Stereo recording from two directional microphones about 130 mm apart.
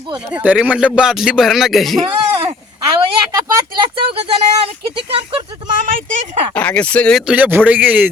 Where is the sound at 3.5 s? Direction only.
35° right (ahead or behind).